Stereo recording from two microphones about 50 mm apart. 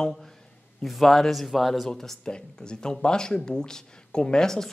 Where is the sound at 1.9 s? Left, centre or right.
Centre.